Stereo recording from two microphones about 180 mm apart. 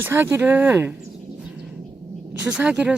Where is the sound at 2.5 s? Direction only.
5° right (ahead or behind).